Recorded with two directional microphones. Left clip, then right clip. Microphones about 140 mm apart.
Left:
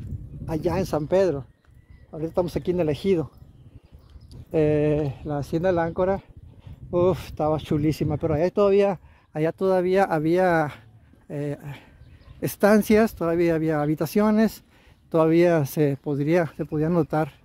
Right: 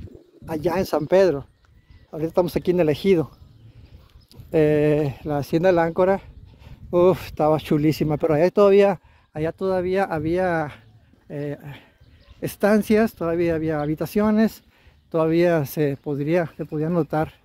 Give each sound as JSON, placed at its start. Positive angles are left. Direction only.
{"t": 0.5, "sound": "speech", "side_deg": 0}
{"t": 2.0, "sound": "speech", "side_deg": -20}
{"t": 4.3, "sound": "speech", "side_deg": -5}
{"t": 4.9, "sound": "speech", "side_deg": -10}
{"t": 5.4, "sound": "speech", "side_deg": -25}
{"t": 8.2, "sound": "speech", "side_deg": -25}
{"t": 9.3, "sound": "speech", "side_deg": 30}
{"t": 11.2, "sound": "speech", "side_deg": 30}
{"t": 14.3, "sound": "speech", "side_deg": 20}